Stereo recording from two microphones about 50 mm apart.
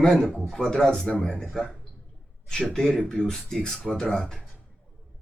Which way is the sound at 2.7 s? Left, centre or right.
Centre.